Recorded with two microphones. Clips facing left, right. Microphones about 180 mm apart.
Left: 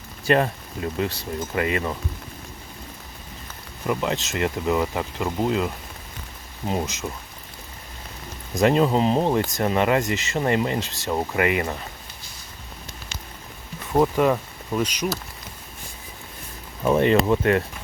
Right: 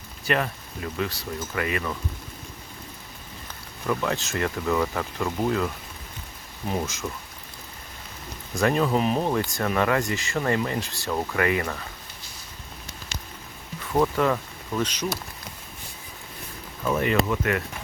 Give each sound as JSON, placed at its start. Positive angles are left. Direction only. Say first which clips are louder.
{"t": 0.3, "sound": "speech", "louder": "left 6 dB", "side_deg": 30}
{"t": 3.8, "sound": "speech", "louder": "left 2 dB", "side_deg": 20}
{"t": 8.5, "sound": "speech", "louder": "left 4 dB", "side_deg": 20}
{"t": 13.9, "sound": "speech", "louder": "left 3 dB", "side_deg": 20}
{"t": 16.8, "sound": "speech", "louder": "left 5 dB", "side_deg": 30}